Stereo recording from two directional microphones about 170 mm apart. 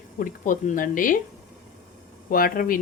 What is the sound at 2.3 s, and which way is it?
Speech, 55° left (ahead or behind).